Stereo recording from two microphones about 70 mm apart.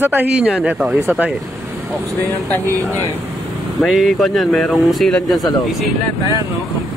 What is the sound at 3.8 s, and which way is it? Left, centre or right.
Speech, centre.